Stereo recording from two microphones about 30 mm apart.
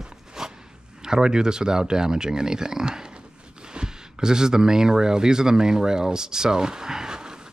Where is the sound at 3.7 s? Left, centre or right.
Right.